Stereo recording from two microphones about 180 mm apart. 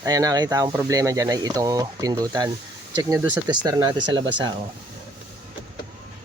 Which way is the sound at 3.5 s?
20° right (ahead or behind).